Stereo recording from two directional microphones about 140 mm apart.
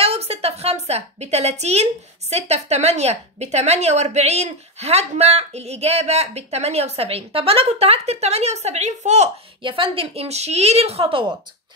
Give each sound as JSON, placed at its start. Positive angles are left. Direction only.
{"t": 0.0, "sound": "a woman's voice", "side_deg": -45}
{"t": 9.6, "sound": "a woman's voice", "side_deg": -40}